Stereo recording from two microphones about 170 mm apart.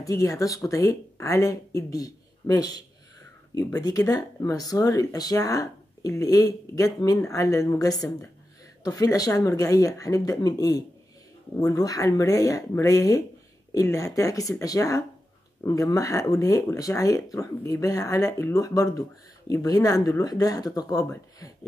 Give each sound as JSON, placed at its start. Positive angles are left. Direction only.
{"t": 0.0, "sound": "speech", "side_deg": 20}
{"t": 3.8, "sound": "speech", "side_deg": 20}